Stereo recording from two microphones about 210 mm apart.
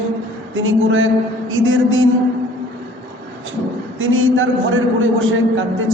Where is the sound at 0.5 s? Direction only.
70° right (ahead or behind).